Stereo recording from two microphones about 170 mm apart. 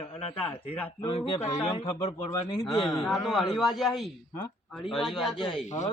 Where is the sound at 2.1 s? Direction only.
25° left (ahead or behind).